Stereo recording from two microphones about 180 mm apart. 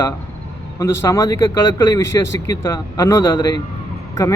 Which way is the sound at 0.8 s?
15° left (ahead or behind).